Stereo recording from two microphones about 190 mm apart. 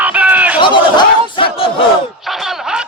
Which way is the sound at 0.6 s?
25° left (ahead or behind).